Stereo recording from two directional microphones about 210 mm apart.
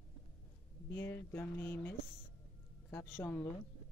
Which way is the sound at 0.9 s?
10° left (ahead or behind).